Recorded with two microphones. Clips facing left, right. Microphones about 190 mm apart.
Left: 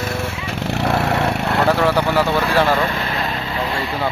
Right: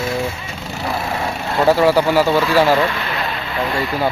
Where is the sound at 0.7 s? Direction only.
70° left (ahead or behind).